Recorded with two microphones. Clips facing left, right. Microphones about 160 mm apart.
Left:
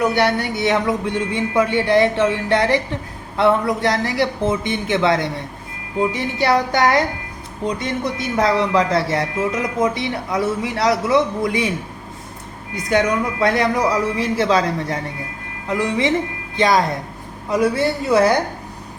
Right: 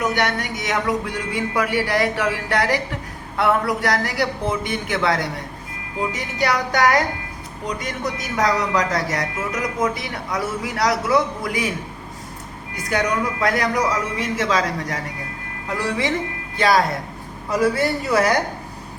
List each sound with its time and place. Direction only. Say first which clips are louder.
0.0 s speech: left 4 dB; 30° left (ahead or behind)
12.7 s speech: left 4 dB; 25° left (ahead or behind)